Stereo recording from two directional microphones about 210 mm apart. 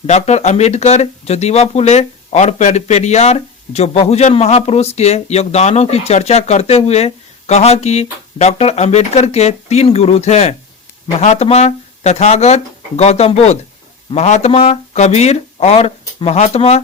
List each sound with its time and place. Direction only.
0.1 s speech: 30° left (ahead or behind)